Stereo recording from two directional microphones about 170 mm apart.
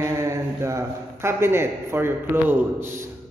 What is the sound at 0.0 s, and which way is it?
A man's voice, 15° right (ahead or behind).